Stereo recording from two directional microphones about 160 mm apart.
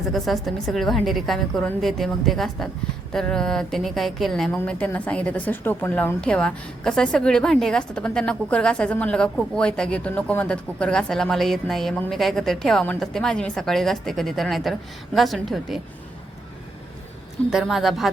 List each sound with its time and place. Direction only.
0.1 s a woman's voice: centre (ahead or behind)
17.5 s a woman's voice: centre (ahead or behind)